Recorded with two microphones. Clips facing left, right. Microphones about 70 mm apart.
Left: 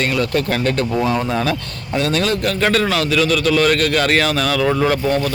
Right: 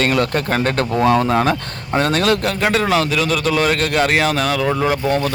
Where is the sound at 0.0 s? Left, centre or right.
Right.